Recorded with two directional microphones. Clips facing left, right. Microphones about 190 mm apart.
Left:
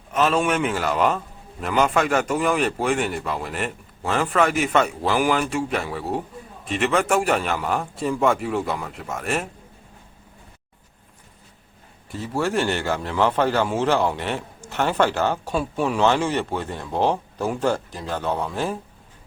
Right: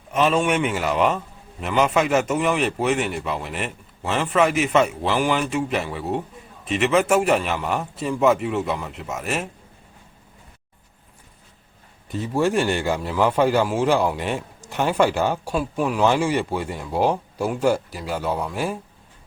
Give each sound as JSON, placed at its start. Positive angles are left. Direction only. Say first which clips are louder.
{"t": 0.1, "sound": "a man's voice", "louder": "right 1 dB", "side_deg": 0}
{"t": 12.0, "sound": "a man's voice", "louder": "right 3 dB", "side_deg": -20}
{"t": 15.5, "sound": "a man's voice", "louder": "even", "side_deg": 0}
{"t": 16.0, "sound": "a man's voice", "louder": "right 2 dB", "side_deg": -10}